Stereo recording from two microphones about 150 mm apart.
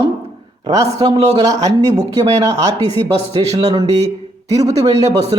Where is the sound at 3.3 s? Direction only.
25° right (ahead or behind).